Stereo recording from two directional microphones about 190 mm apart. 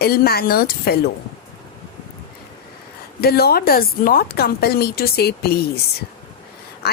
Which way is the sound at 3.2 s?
55° left (ahead or behind).